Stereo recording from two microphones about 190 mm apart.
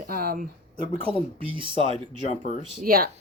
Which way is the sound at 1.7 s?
35° left (ahead or behind).